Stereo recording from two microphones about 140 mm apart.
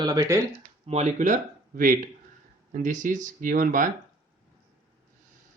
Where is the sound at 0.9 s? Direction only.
50° right (ahead or behind); by 3.8 s 70° right (ahead or behind).